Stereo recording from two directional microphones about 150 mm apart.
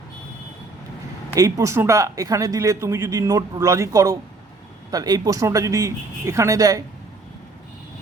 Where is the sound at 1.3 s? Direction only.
20° right (ahead or behind).